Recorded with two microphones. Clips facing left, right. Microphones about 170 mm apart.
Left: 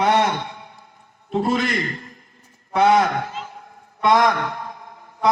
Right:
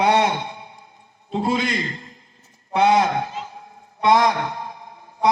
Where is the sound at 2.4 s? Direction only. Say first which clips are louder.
Left 1 dB; 50° left (ahead or behind).